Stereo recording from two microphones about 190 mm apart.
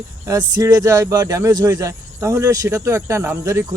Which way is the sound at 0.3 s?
20° right (ahead or behind).